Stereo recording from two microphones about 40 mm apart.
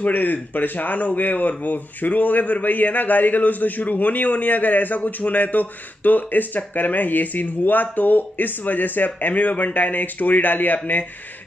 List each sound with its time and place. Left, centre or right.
0.0 s a man's voice: left